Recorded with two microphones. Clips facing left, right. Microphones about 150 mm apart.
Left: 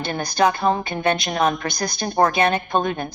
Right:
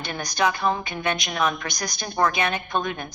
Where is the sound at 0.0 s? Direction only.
30° left (ahead or behind).